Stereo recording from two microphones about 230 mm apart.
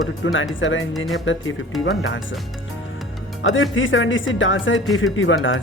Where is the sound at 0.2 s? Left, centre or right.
Left.